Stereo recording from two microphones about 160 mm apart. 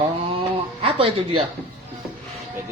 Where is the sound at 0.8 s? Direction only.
35° right (ahead or behind).